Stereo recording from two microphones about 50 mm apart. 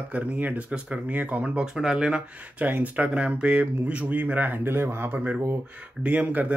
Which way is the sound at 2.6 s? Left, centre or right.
Right.